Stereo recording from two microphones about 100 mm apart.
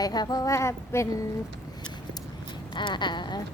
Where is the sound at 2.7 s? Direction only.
50° left (ahead or behind).